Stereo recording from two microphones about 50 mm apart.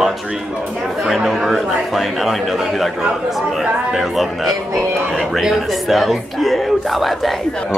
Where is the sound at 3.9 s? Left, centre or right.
Centre.